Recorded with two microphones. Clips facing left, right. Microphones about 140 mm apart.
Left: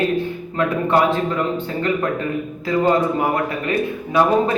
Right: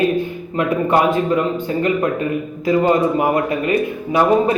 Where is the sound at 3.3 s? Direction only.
20° right (ahead or behind).